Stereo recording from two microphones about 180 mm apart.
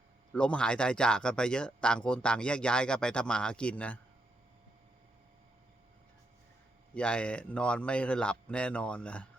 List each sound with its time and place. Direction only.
0.3 s speech: 5° left (ahead or behind)
6.9 s speech: 5° left (ahead or behind)